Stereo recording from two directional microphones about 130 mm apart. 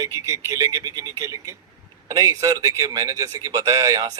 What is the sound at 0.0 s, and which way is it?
A man's voice, 25° right (ahead or behind).